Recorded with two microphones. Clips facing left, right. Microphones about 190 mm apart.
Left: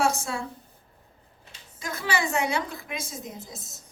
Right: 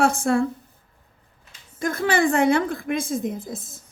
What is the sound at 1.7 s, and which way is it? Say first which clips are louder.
A woman's voice: right 8 dB; 55° right (ahead or behind).